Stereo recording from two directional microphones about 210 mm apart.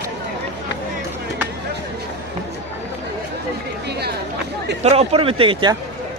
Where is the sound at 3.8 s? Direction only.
50° right (ahead or behind).